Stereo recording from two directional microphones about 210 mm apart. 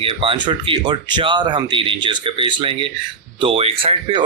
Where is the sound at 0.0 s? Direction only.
25° right (ahead or behind).